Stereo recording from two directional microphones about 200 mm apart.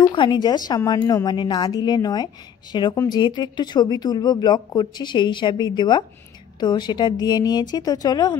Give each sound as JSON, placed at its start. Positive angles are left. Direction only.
{"t": 0.0, "sound": "speech", "side_deg": 25}